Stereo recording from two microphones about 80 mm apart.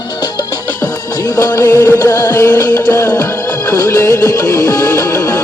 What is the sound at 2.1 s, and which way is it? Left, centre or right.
Music, left.